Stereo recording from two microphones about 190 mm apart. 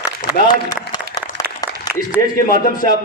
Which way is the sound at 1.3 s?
70° right (ahead or behind).